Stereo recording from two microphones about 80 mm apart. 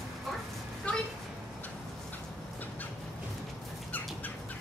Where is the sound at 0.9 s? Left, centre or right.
Centre.